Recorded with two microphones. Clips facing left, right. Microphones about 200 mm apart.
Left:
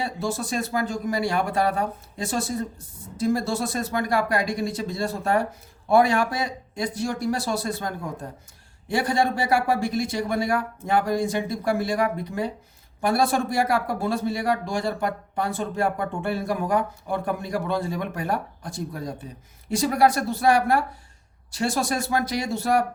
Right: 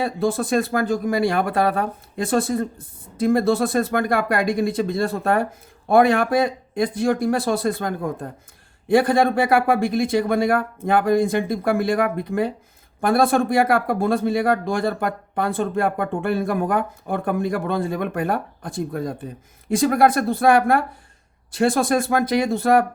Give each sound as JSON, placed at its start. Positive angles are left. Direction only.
{"t": 0.0, "sound": "speech", "side_deg": -55}